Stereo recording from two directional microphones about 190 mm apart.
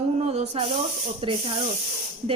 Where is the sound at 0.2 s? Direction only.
35° right (ahead or behind).